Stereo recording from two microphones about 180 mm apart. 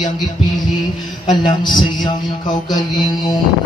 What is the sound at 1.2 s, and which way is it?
A man's voice, 25° left (ahead or behind).